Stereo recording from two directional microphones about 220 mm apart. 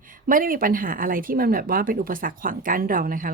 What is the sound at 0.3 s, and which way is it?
Speech, 40° right (ahead or behind).